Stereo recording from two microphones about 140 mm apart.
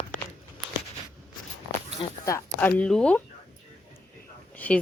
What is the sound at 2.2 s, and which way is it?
Speech, 15° left (ahead or behind).